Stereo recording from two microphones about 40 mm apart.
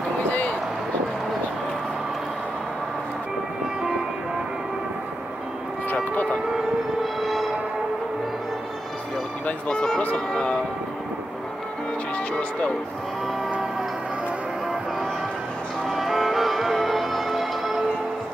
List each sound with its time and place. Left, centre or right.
0.3 s a sound: left
7.2 s train: centre
10.1 s music: left
12.4 s speech: left
15.9 s music: centre